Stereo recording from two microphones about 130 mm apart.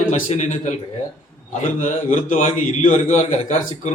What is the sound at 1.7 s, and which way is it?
A man's voice, 65° left (ahead or behind).